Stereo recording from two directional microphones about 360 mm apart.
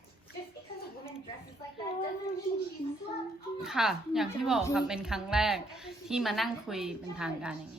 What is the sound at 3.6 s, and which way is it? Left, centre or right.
A woman's voice, centre.